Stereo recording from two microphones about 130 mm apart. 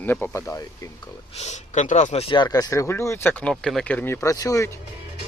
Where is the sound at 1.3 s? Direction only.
60° left (ahead or behind).